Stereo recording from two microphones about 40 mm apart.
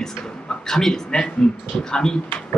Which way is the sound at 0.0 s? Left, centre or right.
Centre.